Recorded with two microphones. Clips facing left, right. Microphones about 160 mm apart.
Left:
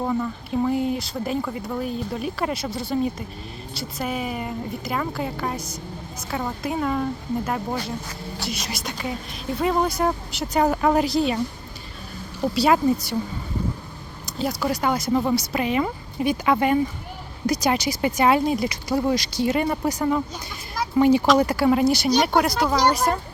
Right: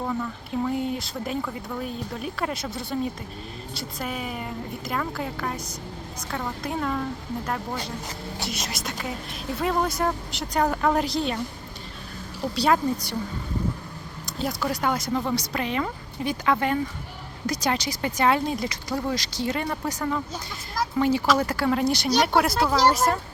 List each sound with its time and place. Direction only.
0.0 s a sound: 15° left (ahead or behind)
0.6 s speech: centre (ahead or behind)
12.5 s speech: 5° left (ahead or behind)
14.3 s speech: centre (ahead or behind)